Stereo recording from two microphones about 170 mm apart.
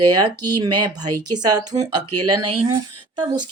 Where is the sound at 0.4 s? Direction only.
25° right (ahead or behind).